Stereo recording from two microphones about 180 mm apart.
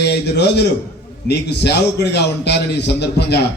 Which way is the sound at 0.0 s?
70° left (ahead or behind).